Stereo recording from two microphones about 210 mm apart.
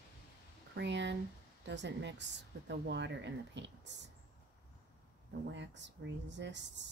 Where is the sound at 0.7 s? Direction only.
55° right (ahead or behind).